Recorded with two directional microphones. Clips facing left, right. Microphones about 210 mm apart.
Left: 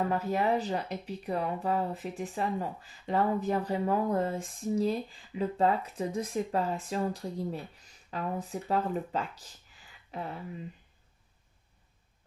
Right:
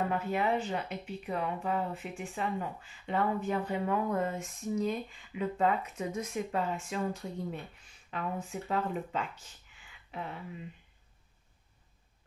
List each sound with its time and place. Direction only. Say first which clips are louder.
0.1 s speech: left 2 dB; 40° left (ahead or behind)